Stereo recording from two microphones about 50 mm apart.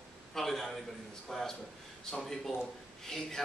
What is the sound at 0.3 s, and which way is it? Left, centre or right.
A man's voice, centre.